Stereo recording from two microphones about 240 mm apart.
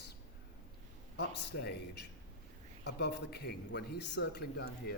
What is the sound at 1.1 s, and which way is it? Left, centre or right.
A man's voice, left.